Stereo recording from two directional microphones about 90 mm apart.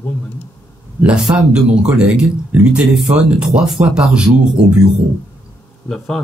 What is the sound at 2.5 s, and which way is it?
Speech, 20° right (ahead or behind).